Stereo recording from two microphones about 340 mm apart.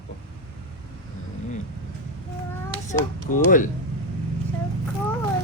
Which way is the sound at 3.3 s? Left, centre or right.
Left.